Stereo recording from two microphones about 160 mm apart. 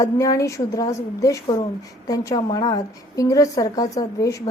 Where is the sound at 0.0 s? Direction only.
20° left (ahead or behind).